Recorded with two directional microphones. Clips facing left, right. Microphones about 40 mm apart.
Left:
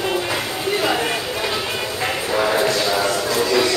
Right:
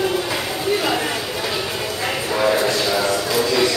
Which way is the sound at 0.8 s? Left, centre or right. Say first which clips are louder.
Left 1 dB; centre.